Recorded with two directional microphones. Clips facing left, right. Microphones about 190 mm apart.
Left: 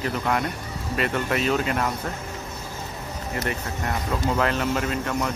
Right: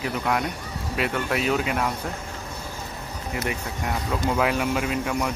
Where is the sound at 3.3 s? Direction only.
5° right (ahead or behind).